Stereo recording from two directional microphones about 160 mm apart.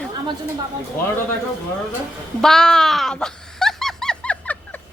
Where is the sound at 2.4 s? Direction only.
5° left (ahead or behind).